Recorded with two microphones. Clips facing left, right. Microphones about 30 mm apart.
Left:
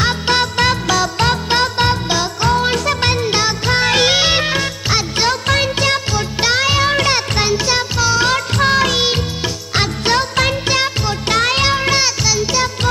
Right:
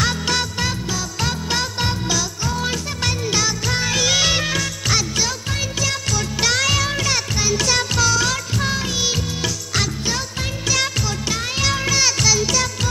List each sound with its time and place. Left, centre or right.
0.3 s music: left
1.2 s music: left
4.1 s music: left
5.5 s music: left
6.1 s music: left
7.5 s music: centre
8.3 s music: left
10.0 s music: left
11.6 s music: left
12.0 s music: centre